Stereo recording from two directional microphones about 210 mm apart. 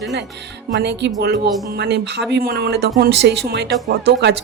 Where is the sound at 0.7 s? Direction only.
55° right (ahead or behind).